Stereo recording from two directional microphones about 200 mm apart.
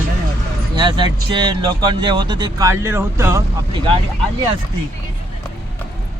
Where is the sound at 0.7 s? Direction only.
20° right (ahead or behind).